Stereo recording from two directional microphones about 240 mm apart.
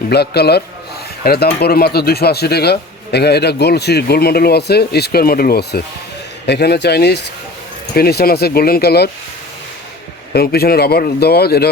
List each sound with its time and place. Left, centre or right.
0.1 s a man's voice: left
10.3 s a man's voice: left